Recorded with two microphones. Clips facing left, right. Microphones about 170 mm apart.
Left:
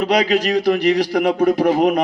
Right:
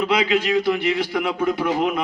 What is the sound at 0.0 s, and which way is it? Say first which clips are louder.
A man's voice: left 3 dB; 40° left (ahead or behind).